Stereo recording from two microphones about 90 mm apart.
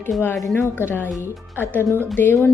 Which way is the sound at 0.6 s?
25° left (ahead or behind).